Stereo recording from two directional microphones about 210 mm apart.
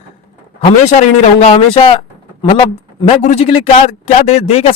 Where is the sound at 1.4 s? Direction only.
30° left (ahead or behind).